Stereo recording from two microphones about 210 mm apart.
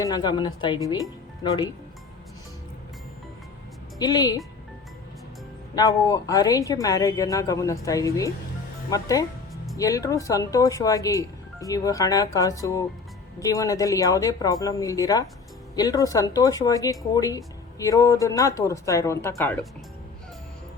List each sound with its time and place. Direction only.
0.0 s speech: 20° left (ahead or behind)
3.9 s speech: 20° left (ahead or behind)
5.7 s speech: 15° left (ahead or behind)